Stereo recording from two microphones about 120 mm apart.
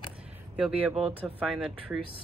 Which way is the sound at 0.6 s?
10° right (ahead or behind).